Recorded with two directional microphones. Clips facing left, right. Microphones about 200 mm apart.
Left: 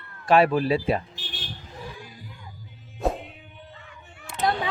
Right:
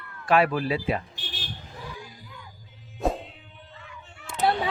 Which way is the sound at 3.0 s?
Centre (ahead or behind).